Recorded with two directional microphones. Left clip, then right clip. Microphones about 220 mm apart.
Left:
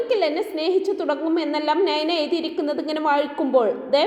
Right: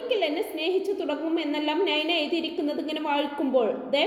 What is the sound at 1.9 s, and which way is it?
A woman's voice, 20° left (ahead or behind).